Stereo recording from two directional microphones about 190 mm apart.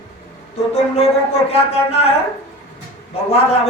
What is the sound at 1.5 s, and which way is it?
Speech, 30° left (ahead or behind).